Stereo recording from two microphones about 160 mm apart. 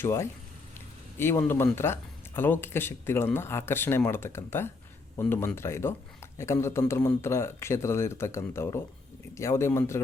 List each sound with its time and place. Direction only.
0.0 s speech: 15° left (ahead or behind)